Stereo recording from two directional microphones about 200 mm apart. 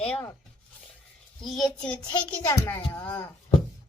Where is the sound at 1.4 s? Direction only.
5° left (ahead or behind).